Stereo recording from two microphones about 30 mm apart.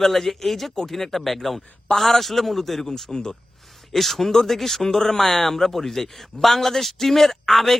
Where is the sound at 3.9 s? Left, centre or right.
Centre.